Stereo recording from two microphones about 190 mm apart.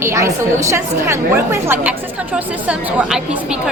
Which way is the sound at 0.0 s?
15° right (ahead or behind).